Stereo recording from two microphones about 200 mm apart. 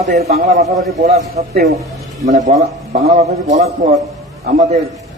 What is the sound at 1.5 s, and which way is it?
Speech, 50° right (ahead or behind).